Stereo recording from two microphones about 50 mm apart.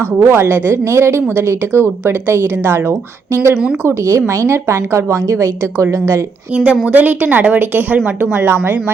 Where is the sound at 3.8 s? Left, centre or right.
Right.